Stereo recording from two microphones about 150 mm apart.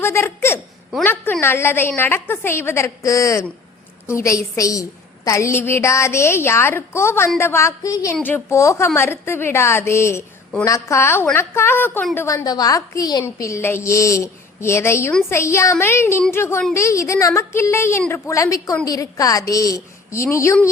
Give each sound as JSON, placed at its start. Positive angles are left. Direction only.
{"t": 0.0, "sound": "a woman's voice", "side_deg": 15}